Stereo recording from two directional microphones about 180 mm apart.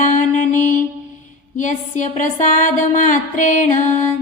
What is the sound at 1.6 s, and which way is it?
Music, 45° left (ahead or behind).